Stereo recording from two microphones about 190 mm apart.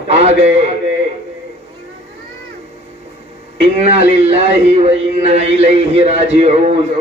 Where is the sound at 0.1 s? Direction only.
35° right (ahead or behind).